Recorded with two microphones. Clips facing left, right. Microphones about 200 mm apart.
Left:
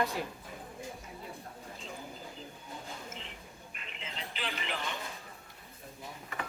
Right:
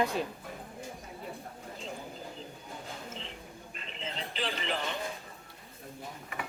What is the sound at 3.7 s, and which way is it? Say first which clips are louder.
Music: right 6 dB; 35° right (ahead or behind).